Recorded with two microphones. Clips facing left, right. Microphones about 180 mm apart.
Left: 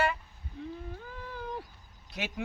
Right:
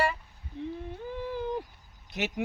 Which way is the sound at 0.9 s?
25° right (ahead or behind).